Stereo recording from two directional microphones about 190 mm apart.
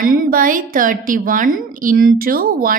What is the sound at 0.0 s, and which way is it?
A woman's voice, 45° right (ahead or behind).